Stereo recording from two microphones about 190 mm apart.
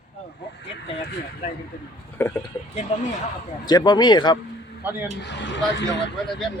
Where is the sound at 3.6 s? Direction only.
20° left (ahead or behind).